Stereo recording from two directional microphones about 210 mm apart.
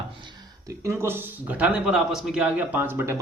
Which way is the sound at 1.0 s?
10° right (ahead or behind).